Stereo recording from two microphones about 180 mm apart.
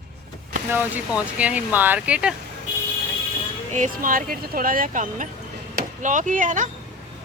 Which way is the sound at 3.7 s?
45° right (ahead or behind).